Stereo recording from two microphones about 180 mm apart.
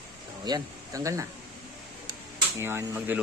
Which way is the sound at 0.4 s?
20° right (ahead or behind).